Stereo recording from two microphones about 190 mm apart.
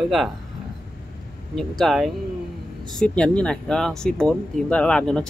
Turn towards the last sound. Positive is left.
turn(degrees=5)  # may be behind; listen again after turning